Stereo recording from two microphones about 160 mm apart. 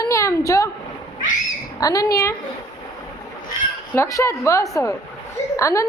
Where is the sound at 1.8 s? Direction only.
20° left (ahead or behind).